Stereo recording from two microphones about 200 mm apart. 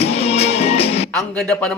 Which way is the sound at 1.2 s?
Centre (ahead or behind).